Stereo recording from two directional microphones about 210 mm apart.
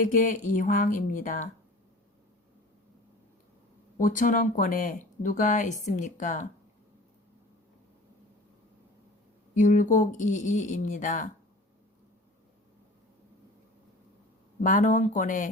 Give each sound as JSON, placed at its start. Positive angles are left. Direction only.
{"t": 0.0, "sound": "speech", "side_deg": 40}
{"t": 3.9, "sound": "speech", "side_deg": 40}
{"t": 9.6, "sound": "speech", "side_deg": 35}
{"t": 14.6, "sound": "speech", "side_deg": 40}